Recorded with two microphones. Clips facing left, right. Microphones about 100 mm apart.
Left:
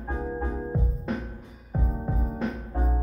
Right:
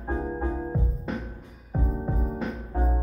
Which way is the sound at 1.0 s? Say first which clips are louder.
Left 1 dB; centre (ahead or behind).